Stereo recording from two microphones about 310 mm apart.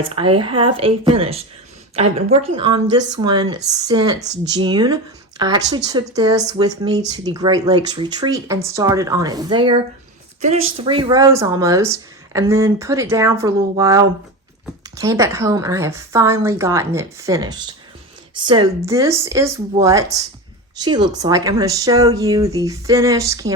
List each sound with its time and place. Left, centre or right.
0.2 s a woman's voice: centre
10.6 s speech: right
10.8 s a woman's voice: centre